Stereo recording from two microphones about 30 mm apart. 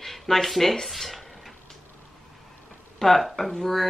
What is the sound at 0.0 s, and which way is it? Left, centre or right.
Speech, centre.